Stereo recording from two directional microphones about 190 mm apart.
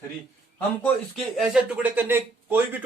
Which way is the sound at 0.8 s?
Centre (ahead or behind).